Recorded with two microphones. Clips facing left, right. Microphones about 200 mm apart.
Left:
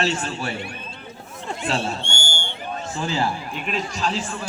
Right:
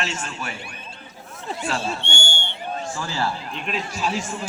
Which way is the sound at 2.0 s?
65° right (ahead or behind).